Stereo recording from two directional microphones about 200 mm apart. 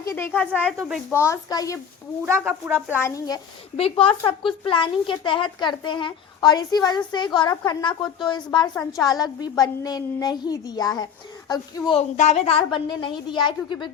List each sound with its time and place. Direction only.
0.0 s speech: 15° left (ahead or behind)
0.6 s speech: centre (ahead or behind)
1.1 s speech: 15° left (ahead or behind)
2.4 s speech: centre (ahead or behind)
2.9 s a child's voice: 15° left (ahead or behind)
12.1 s a child's voice: 35° left (ahead or behind)